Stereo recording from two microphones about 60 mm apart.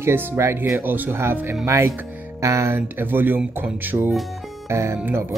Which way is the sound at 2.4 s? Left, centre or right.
Right.